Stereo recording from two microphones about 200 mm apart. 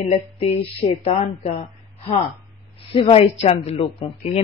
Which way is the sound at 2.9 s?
30° left (ahead or behind).